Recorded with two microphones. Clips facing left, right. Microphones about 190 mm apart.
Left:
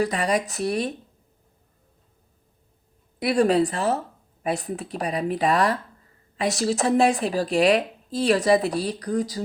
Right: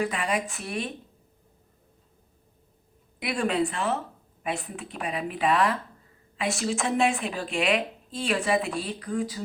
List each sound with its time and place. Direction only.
0.0 s a woman's voice: 40° left (ahead or behind)
3.2 s a woman's voice: 35° left (ahead or behind)